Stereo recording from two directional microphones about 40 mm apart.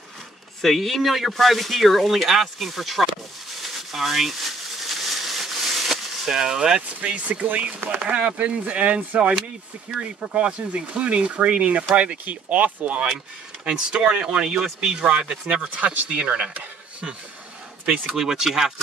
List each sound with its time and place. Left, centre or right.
0.6 s speech: centre
4.8 s a sound: centre
7.0 s speech: right
15.8 s speech: right
16.2 s speech: right
18.0 s speech: centre